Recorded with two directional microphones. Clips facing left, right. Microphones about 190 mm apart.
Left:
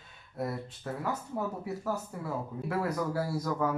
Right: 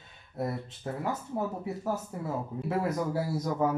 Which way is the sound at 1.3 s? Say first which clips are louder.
Right 2 dB; 20° right (ahead or behind).